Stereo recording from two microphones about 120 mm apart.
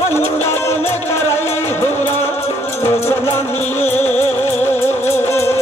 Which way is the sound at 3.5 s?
20° left (ahead or behind).